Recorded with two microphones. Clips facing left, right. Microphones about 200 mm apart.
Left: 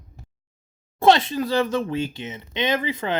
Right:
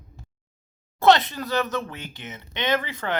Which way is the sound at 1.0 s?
25° left (ahead or behind).